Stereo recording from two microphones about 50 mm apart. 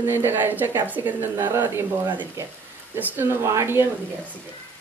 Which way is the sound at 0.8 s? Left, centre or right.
Right.